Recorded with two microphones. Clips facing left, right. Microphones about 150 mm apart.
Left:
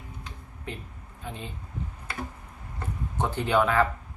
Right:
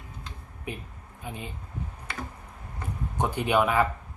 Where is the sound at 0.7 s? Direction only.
10° right (ahead or behind).